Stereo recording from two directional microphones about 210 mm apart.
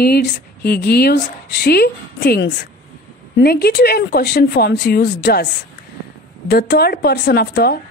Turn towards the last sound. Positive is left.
turn(degrees=50)  # may be behind; listen again after turning